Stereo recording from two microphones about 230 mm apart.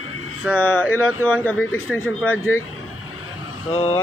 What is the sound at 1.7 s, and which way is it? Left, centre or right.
Speech, left.